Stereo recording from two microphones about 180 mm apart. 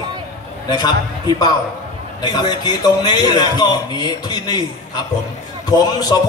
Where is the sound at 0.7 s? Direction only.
20° left (ahead or behind).